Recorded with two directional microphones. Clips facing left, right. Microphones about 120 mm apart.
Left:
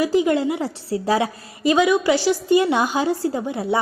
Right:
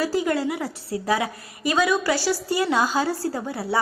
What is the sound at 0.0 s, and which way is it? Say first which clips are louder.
A woman's voice: left 5 dB; 20° left (ahead or behind).